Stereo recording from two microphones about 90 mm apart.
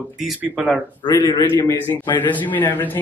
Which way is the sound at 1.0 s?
45° left (ahead or behind).